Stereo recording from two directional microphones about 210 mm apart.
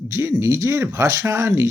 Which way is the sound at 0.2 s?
10° right (ahead or behind).